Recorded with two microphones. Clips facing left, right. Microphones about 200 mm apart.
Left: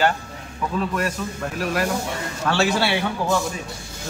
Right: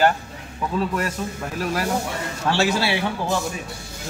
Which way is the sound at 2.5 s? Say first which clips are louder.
Even; 30° right (ahead or behind).